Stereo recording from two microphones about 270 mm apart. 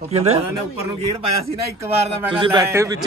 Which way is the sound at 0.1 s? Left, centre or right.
Right.